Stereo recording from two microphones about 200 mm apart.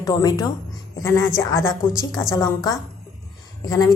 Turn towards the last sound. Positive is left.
turn(degrees=20)  # may be behind; listen again after turning